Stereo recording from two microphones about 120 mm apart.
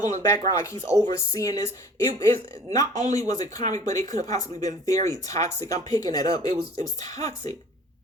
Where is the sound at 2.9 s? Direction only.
75° right (ahead or behind).